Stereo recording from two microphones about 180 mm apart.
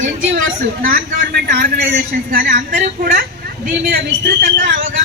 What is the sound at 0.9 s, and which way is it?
A man's voice, 50° right (ahead or behind).